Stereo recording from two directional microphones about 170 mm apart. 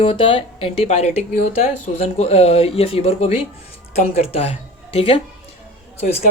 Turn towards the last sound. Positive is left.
turn(degrees=40)  # may be behind; listen again after turning